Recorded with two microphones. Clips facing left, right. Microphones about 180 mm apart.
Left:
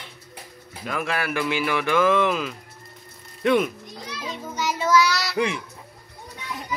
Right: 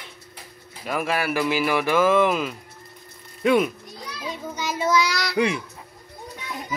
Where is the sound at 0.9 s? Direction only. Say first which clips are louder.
Right 2 dB; 5° right (ahead or behind).